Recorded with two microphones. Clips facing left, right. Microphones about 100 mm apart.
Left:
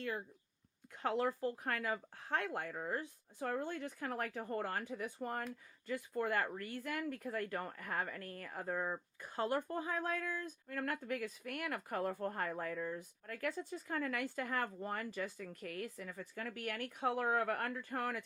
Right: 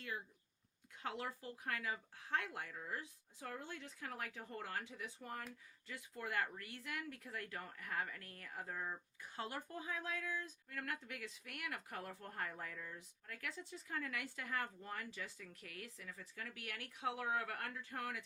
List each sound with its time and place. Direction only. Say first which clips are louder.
0.9 s speech: left 9 dB; 45° left (ahead or behind)